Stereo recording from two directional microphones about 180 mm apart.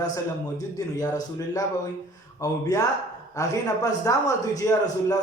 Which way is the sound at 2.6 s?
20° left (ahead or behind).